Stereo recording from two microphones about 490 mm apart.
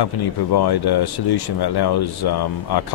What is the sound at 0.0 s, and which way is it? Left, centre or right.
Speech, left.